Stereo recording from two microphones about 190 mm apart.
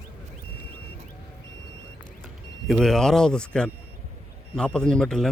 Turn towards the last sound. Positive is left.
turn(degrees=5)  # may be behind; listen again after turning